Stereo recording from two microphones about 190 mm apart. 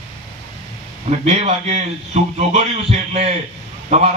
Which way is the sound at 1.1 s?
35° right (ahead or behind).